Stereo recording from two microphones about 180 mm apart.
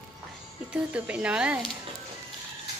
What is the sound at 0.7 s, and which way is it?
A woman's voice, 5° right (ahead or behind).